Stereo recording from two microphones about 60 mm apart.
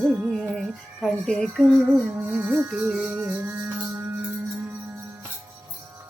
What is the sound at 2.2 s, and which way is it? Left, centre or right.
Music, right.